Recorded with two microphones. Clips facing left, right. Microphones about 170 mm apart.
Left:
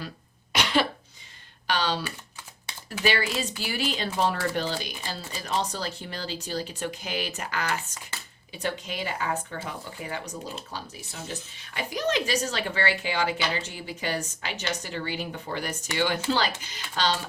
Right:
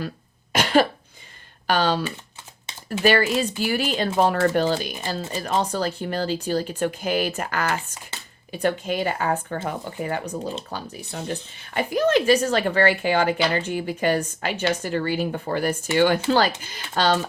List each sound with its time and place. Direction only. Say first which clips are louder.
0.5 s cough: right 6 dB; 45° right (ahead or behind)
1.6 s speech: right 6 dB; 50° right (ahead or behind)